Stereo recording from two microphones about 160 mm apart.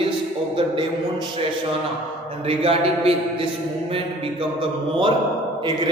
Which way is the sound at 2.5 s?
35° right (ahead or behind).